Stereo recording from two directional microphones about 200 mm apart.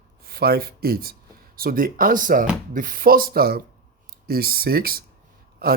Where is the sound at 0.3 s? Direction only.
50° right (ahead or behind).